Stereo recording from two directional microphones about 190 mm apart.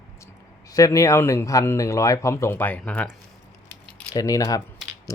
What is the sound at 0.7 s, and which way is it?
Speech, 15° left (ahead or behind).